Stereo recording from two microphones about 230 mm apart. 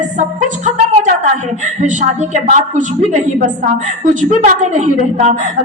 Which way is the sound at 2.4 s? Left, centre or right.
Right.